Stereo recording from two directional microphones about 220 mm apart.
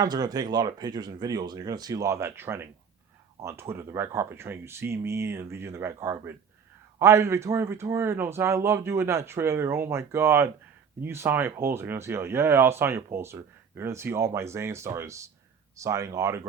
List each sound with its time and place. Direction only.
0.0 s speech: 15° right (ahead or behind)